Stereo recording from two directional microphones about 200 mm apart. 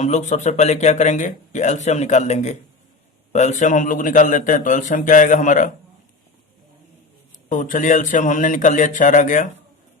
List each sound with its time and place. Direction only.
0.0 s speech: 35° left (ahead or behind)
7.5 s speech: 40° left (ahead or behind)